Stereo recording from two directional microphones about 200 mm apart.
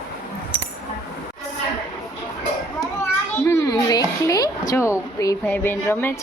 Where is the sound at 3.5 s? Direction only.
15° left (ahead or behind).